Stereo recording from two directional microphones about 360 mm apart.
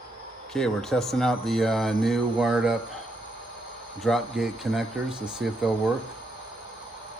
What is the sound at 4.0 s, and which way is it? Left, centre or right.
Speech, centre.